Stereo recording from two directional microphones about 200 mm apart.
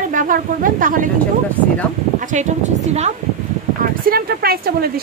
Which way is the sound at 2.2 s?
40° right (ahead or behind).